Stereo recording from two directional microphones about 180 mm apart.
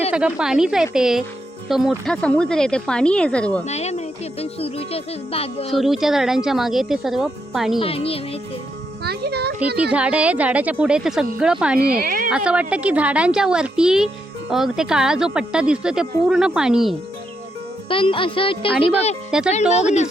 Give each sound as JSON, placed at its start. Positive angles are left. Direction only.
{"t": 0.1, "sound": "speech", "side_deg": -5}
{"t": 3.7, "sound": "a child's voice", "side_deg": 35}
{"t": 5.7, "sound": "speech", "side_deg": 0}
{"t": 7.8, "sound": "a child's voice", "side_deg": 30}
{"t": 9.0, "sound": "a child's voice", "side_deg": -65}
{"t": 9.9, "sound": "a woman's voice", "side_deg": -5}
{"t": 11.9, "sound": "a sound", "side_deg": -55}
{"t": 12.3, "sound": "speech", "side_deg": -5}
{"t": 17.8, "sound": "speech", "side_deg": 30}
{"t": 19.3, "sound": "speech", "side_deg": -5}
{"t": 19.7, "sound": "a child's voice", "side_deg": 40}